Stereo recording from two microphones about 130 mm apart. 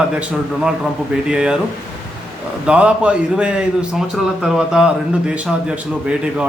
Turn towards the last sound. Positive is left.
turn(degrees=-10)  # may be behind; listen again after turning